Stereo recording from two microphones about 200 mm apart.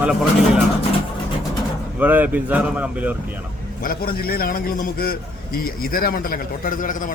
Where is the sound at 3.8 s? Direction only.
45° left (ahead or behind).